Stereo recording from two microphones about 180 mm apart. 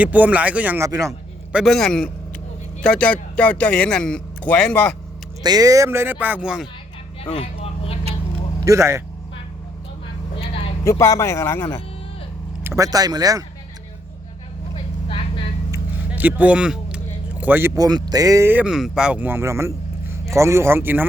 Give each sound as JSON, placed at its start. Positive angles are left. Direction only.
{"t": 0.0, "sound": "speech", "side_deg": -10}
{"t": 1.5, "sound": "a man's voice", "side_deg": 0}
{"t": 5.4, "sound": "speech", "side_deg": -20}
{"t": 7.3, "sound": "vehicle", "side_deg": 35}
{"t": 8.6, "sound": "speech", "side_deg": -15}
{"t": 10.3, "sound": "vehicle", "side_deg": 30}
{"t": 10.8, "sound": "a man's voice", "side_deg": 15}
{"t": 12.6, "sound": "speech", "side_deg": -15}
{"t": 15.0, "sound": "vehicle", "side_deg": 30}
{"t": 15.7, "sound": "vehicle", "side_deg": -10}
{"t": 17.4, "sound": "speech", "side_deg": -10}